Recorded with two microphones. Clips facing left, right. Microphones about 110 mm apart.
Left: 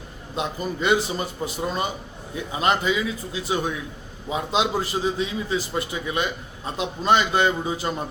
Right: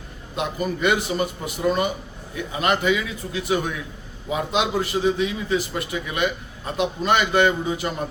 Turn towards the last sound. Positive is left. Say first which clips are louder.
# right 2 dB
turn(degrees=30)  # may be behind; listen again after turning